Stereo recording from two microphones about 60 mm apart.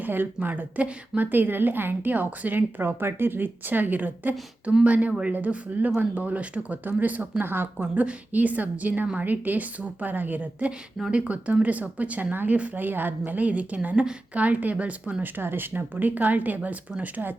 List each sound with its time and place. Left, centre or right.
0.0 s a woman's voice: right
7.8 s a woman's voice: right
10.7 s a woman's voice: centre; by 17.3 s right